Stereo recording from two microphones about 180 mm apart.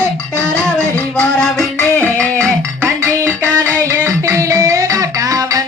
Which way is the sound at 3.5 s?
10° left (ahead or behind).